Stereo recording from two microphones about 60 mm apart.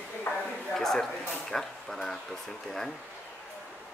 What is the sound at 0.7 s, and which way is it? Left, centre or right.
Speech, centre.